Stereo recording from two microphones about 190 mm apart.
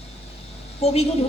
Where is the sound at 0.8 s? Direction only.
30° left (ahead or behind).